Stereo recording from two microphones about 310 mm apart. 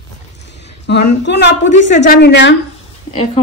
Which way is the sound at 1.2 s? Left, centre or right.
Left.